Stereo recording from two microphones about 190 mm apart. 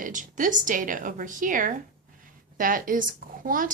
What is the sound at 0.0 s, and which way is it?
Speech, 45° right (ahead or behind).